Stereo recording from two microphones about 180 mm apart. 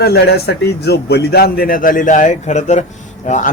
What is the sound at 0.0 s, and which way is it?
A man's voice, 60° left (ahead or behind).